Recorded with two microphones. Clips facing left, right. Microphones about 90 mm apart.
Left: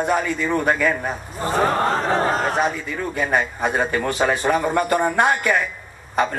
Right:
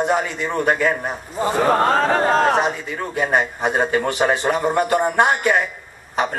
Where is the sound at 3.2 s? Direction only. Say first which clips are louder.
Right 2 dB; 20° right (ahead or behind).